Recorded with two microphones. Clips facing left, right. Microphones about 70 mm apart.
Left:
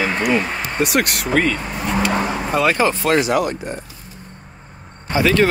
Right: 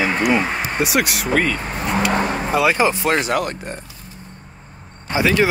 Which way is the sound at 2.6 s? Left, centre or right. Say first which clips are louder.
Even; centre.